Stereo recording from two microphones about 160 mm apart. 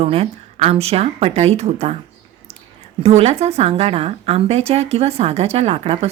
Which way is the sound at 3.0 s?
40° right (ahead or behind).